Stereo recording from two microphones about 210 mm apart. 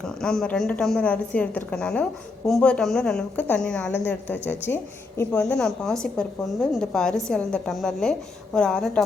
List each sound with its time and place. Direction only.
0.0 s a woman's voice: 5° left (ahead or behind)